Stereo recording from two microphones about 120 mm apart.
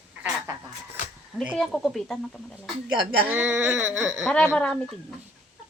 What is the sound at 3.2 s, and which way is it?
Speech, 15° right (ahead or behind).